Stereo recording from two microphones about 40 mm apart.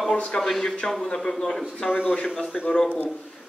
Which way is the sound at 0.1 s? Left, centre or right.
Left.